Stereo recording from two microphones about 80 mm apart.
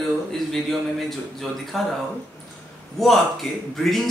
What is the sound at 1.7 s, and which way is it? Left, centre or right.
Speech, centre.